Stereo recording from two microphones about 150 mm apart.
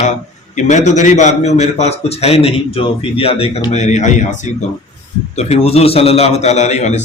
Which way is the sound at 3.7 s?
50° left (ahead or behind).